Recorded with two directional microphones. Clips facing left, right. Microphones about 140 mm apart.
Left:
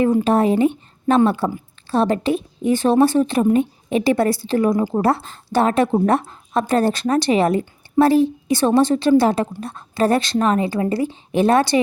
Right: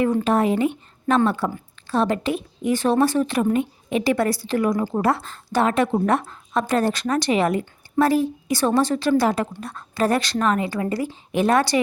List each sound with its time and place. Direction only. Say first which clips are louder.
0.3 s a woman's voice: left 4 dB; 30° left (ahead or behind)